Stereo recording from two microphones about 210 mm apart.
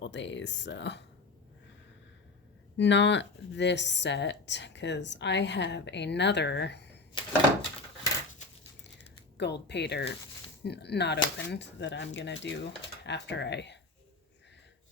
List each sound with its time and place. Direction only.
0.0 s speech: 60° left (ahead or behind)
2.7 s speech: 55° left (ahead or behind)
9.4 s speech: 55° left (ahead or behind)